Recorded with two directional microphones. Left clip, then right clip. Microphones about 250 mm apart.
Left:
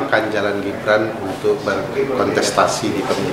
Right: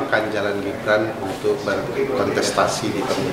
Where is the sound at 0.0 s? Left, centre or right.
Centre.